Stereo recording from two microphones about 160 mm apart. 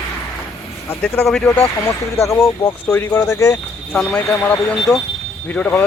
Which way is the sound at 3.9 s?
5° left (ahead or behind).